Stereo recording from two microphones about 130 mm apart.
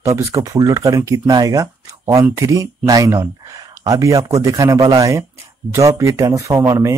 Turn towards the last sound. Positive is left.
turn(degrees=-20)  # may be behind; listen again after turning